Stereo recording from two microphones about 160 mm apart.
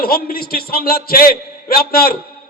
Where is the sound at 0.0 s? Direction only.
70° left (ahead or behind).